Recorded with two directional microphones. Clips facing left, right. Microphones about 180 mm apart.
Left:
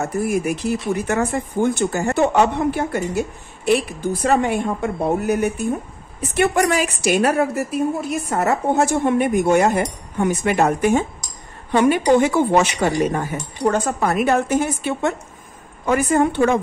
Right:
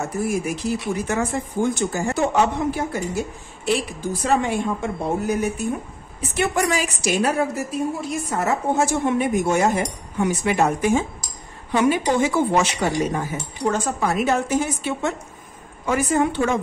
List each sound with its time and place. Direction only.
0.0 s a woman's voice: 60° left (ahead or behind)